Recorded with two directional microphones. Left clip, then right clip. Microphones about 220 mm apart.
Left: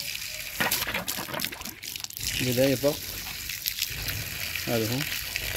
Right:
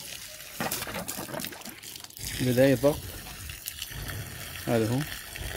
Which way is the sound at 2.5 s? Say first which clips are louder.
Right 3 dB; 5° right (ahead or behind).